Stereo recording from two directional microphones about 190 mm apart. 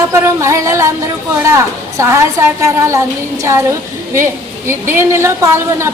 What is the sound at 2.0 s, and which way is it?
A woman's voice, 15° right (ahead or behind).